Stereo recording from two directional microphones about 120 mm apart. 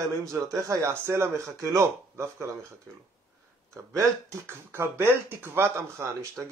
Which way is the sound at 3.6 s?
25° right (ahead or behind).